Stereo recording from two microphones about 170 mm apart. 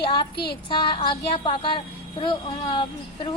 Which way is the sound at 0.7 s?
25° left (ahead or behind).